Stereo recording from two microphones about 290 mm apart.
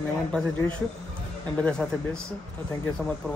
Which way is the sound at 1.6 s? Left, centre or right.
Centre.